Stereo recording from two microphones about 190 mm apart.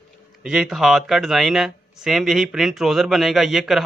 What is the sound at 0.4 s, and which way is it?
Speech, 5° right (ahead or behind).